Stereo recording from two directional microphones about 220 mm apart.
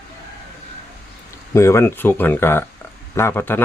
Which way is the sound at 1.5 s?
10° left (ahead or behind).